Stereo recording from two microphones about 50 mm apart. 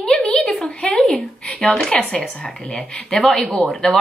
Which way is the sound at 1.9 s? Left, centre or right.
Centre.